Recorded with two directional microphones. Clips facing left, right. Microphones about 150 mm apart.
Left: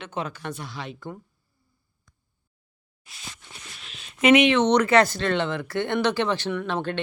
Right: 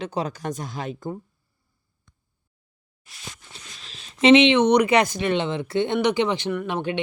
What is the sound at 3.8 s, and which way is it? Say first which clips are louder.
Speech: right 3 dB; 25° right (ahead or behind).